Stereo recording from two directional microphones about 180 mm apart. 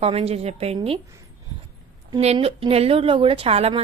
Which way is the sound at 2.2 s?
35° right (ahead or behind).